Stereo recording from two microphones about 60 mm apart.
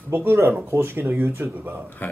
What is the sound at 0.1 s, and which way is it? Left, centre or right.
Speech, right.